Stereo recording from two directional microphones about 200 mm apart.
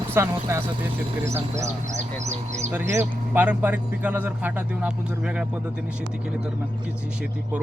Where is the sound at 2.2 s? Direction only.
35° right (ahead or behind).